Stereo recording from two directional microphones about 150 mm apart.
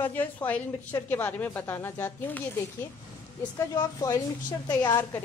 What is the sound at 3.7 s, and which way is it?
Speech, 25° left (ahead or behind).